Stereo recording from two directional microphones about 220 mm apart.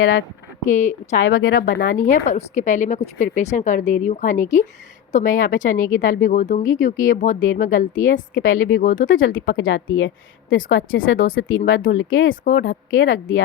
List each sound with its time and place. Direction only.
0.0 s speech: 65° left (ahead or behind)
0.7 s speech: 35° left (ahead or behind)
1.3 s speech: 60° left (ahead or behind)
1.5 s speech: 45° left (ahead or behind)
7.3 s speech: 55° left (ahead or behind)
7.6 s speech: 40° left (ahead or behind)
8.4 s speech: 60° left (ahead or behind)
8.8 s speech: 40° left (ahead or behind)
9.5 s speech: 60° left (ahead or behind)
12.3 s speech: 45° left (ahead or behind); by 13.4 s 60° left (ahead or behind)